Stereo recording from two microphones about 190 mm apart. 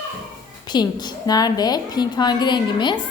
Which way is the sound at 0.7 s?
20° left (ahead or behind).